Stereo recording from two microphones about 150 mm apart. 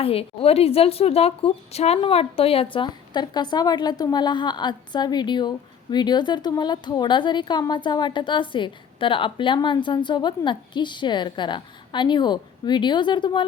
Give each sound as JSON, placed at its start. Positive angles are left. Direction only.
{"t": 0.0, "sound": "a woman's voice", "side_deg": 40}